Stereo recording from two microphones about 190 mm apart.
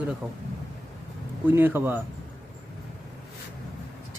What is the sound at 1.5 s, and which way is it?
Speech, 10° right (ahead or behind).